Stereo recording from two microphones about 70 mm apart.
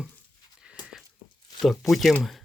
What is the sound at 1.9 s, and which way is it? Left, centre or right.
Speech, centre.